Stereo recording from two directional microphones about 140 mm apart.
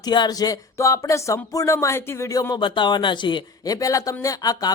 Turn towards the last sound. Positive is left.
turn(degrees=25)  # may be behind; listen again after turning